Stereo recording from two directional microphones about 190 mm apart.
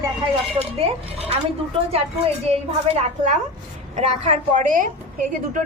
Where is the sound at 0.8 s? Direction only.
30° right (ahead or behind).